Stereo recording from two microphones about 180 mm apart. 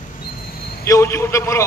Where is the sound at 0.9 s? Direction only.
15° left (ahead or behind).